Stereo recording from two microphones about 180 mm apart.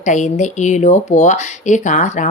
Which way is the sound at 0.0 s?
40° left (ahead or behind).